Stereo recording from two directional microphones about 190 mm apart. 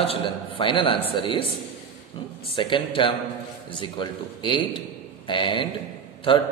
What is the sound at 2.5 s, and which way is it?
A man's voice, 25° left (ahead or behind).